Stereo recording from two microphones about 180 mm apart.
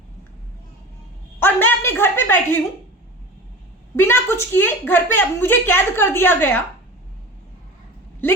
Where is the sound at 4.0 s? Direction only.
15° left (ahead or behind).